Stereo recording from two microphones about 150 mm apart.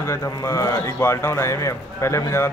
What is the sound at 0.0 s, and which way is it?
Speech, 20° left (ahead or behind).